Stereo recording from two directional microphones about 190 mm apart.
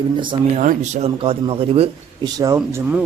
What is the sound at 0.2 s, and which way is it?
Speech, 25° right (ahead or behind).